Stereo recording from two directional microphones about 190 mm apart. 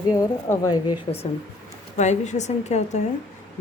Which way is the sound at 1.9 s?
40° left (ahead or behind).